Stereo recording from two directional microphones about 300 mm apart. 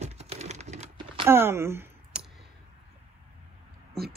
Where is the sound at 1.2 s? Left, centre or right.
Centre.